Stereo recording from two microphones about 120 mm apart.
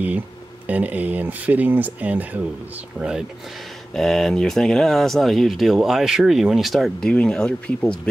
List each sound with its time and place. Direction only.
0.7 s speech: 15° right (ahead or behind); by 8.1 s 5° left (ahead or behind)